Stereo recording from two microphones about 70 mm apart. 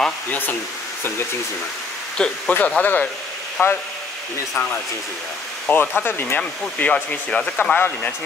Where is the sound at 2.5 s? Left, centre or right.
Left.